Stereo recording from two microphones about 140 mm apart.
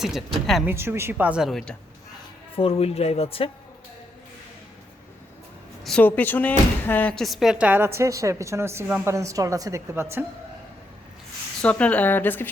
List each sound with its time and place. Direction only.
0.0 s a woman's voice: centre (ahead or behind)
0.6 s speech: 15° right (ahead or behind); by 1.7 s centre (ahead or behind)
2.6 s speech: 45° left (ahead or behind)
6.0 s speech: 10° left (ahead or behind); by 10.2 s 15° right (ahead or behind)
11.6 s a woman's voice: 10° left (ahead or behind)